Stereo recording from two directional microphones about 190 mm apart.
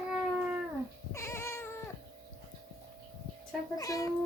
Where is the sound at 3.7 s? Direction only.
20° left (ahead or behind).